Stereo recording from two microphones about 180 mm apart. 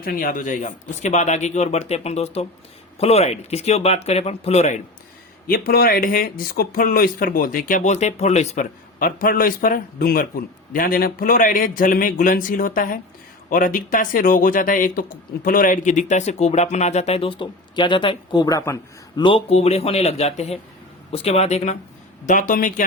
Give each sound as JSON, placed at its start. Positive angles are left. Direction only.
{"t": 0.0, "sound": "speech", "side_deg": 55}
{"t": 5.5, "sound": "speech", "side_deg": 55}